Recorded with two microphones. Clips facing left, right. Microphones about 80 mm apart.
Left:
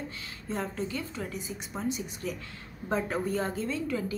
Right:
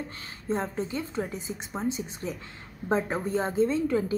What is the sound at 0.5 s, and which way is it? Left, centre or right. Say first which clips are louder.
A woman's voice: right 4 dB; right.